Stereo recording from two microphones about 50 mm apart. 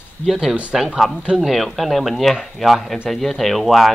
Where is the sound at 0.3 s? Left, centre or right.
Centre.